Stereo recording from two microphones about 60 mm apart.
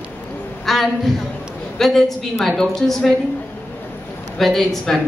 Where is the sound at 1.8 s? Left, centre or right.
Centre.